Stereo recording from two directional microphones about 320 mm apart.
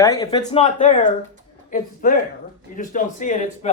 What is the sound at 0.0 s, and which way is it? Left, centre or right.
Speech, centre.